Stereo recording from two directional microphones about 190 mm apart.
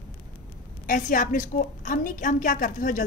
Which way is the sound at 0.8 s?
45° left (ahead or behind).